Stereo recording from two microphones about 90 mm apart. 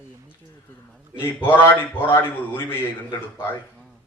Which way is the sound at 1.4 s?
25° left (ahead or behind).